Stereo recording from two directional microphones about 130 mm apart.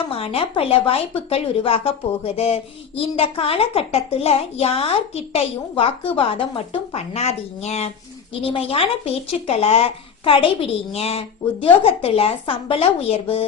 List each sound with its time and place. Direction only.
0.1 s speech: 45° left (ahead or behind)